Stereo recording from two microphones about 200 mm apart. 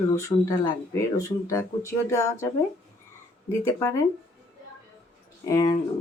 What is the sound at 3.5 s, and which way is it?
Speech, 15° left (ahead or behind).